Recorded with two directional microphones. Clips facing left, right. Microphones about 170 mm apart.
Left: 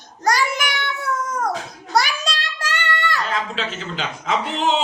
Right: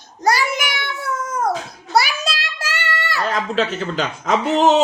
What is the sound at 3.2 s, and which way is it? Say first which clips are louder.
Speech: right 5 dB; 40° right (ahead or behind).